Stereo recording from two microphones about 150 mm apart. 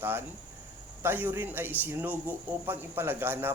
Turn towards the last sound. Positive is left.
turn(degrees=-15)  # may be behind; listen again after turning